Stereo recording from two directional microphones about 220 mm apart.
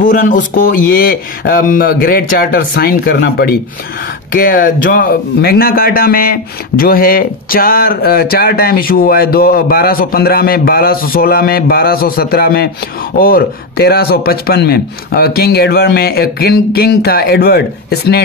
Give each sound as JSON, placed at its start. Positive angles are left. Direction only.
{"t": 0.0, "sound": "a man's voice", "side_deg": 35}